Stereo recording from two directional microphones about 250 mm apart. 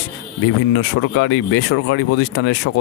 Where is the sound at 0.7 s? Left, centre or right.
Left.